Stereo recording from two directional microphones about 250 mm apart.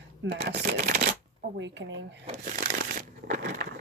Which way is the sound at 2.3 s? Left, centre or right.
Right.